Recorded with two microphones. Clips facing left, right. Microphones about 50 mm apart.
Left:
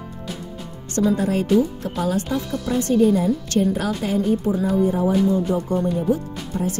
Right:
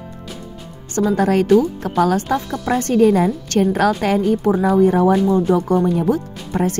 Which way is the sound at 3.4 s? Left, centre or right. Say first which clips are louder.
Right 5 dB; right.